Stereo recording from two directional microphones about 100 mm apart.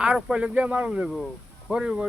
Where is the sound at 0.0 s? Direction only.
10° right (ahead or behind).